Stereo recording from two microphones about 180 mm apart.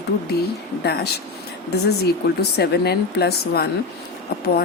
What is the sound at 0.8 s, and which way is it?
Speech, 65° left (ahead or behind).